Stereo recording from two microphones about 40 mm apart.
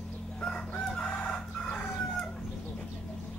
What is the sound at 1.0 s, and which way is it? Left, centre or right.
Chicken, left.